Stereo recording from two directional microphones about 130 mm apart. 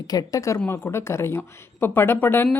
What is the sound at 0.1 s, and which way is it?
Speech, 30° left (ahead or behind).